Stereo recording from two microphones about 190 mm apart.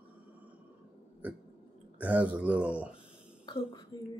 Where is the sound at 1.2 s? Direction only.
10° right (ahead or behind).